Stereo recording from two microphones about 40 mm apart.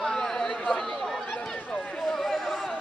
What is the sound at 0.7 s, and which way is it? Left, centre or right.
Chatter, centre.